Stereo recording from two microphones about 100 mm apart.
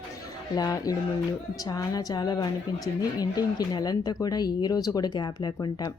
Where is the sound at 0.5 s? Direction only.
40° left (ahead or behind).